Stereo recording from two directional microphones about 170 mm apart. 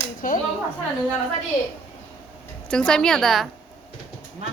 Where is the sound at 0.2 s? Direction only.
55° left (ahead or behind).